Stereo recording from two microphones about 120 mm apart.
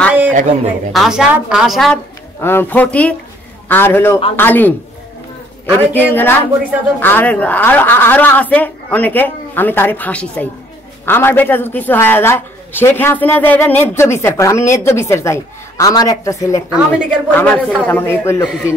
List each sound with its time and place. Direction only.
0.3 s a man's voice: 90° right
0.9 s a woman's voice: 5° right (ahead or behind)
2.4 s a man's voice: 20° left (ahead or behind)
5.8 s a man's voice: 15° left (ahead or behind)
16.9 s a man's voice: 15° left (ahead or behind)